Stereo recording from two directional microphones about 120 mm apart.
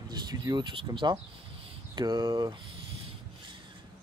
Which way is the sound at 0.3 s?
35° right (ahead or behind).